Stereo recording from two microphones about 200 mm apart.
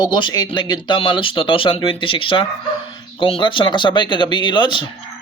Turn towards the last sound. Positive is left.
turn(degrees=25)  # may be behind; listen again after turning